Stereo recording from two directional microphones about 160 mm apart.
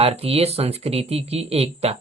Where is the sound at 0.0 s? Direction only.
40° right (ahead or behind).